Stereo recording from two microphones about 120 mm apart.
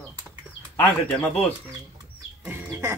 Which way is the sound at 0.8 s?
10° left (ahead or behind).